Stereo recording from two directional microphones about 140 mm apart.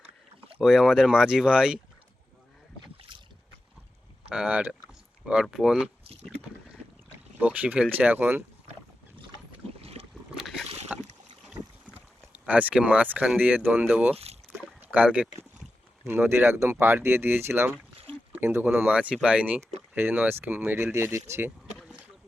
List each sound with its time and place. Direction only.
0.6 s speech: 5° right (ahead or behind)
3.1 s boat: 35° right (ahead or behind)
4.3 s speech: 10° right (ahead or behind)
7.3 s speech: 10° right (ahead or behind)
9.8 s boat: 45° right (ahead or behind)
10.3 s boat: centre (ahead or behind)
11.9 s speech: 10° right (ahead or behind)
21.8 s rowboat: 5° right (ahead or behind)